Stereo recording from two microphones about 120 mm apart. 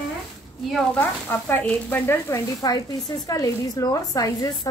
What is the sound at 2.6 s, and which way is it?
A woman's voice, 30° left (ahead or behind).